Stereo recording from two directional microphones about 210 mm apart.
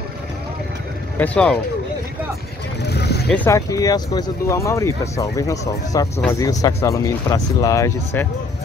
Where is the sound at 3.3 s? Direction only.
10° left (ahead or behind).